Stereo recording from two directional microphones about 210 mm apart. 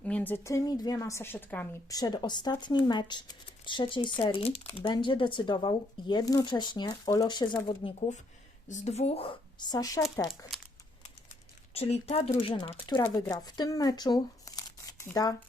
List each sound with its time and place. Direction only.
0.0 s a woman's voice: 5° left (ahead or behind)
2.0 s a woman's voice: 20° left (ahead or behind)
11.7 s speech: 30° left (ahead or behind)